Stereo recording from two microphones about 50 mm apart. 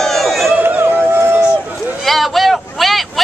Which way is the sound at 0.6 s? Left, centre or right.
Right.